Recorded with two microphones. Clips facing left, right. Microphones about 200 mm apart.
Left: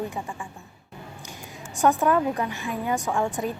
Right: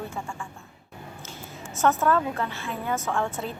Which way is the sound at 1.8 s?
15° left (ahead or behind).